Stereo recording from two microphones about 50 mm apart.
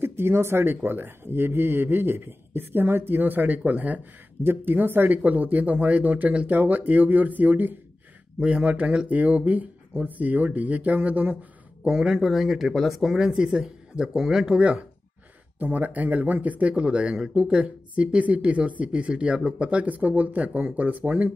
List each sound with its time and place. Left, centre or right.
0.0 s a man's voice: right
4.4 s speech: right
11.8 s speech: centre
14.6 s speech: right
15.6 s speech: right